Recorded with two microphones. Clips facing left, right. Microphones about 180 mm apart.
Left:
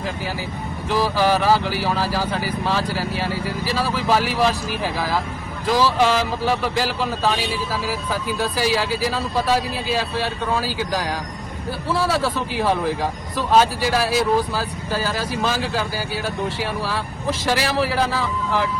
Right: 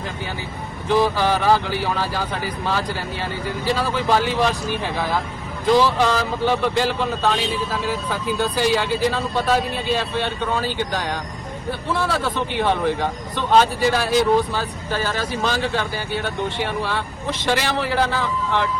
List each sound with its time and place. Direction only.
0.9 s speech: centre (ahead or behind)
14.8 s speech: 35° left (ahead or behind)
15.4 s speech: 5° left (ahead or behind)